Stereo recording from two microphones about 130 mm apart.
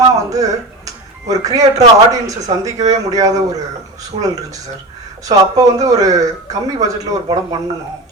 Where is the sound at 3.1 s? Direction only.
25° right (ahead or behind).